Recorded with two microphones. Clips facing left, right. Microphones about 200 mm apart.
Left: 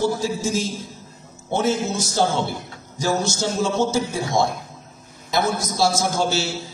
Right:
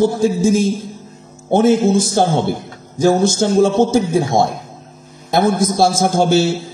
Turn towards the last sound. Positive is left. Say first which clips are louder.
# right 9 dB
turn(degrees=-55)  # may be behind; listen again after turning